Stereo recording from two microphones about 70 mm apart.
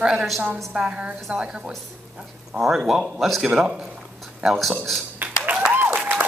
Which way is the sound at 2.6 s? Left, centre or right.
Centre.